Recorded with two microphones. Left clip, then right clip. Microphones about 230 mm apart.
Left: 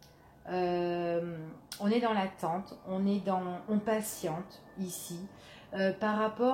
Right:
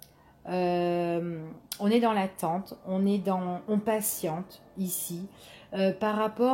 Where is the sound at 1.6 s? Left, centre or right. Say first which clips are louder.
Right 5 dB; right.